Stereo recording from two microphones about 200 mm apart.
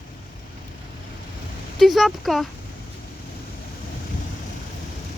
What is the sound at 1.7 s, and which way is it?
Speech, centre (ahead or behind).